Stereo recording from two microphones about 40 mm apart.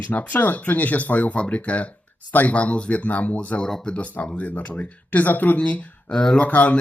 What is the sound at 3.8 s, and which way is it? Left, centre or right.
Speech, left.